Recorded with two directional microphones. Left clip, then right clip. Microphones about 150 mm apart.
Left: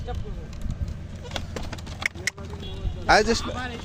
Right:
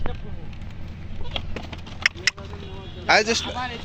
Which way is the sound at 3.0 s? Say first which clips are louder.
Right 1 dB; 50° left (ahead or behind).